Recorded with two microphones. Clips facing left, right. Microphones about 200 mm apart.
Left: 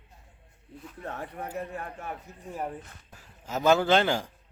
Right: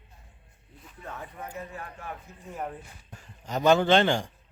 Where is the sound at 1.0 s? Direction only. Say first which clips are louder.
Left 4 dB; 55° left (ahead or behind).